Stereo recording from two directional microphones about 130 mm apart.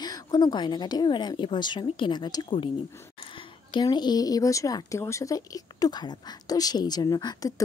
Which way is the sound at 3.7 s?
35° left (ahead or behind).